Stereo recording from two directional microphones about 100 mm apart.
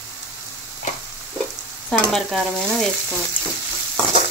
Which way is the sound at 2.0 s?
5° left (ahead or behind).